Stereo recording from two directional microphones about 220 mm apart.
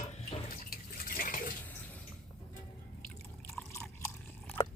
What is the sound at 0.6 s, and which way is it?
Water, 40° left (ahead or behind).